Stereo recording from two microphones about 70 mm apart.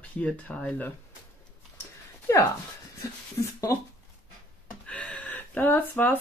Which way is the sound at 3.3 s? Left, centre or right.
Left.